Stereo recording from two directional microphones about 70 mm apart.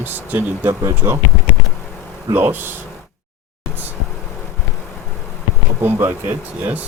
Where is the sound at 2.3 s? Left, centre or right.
Right.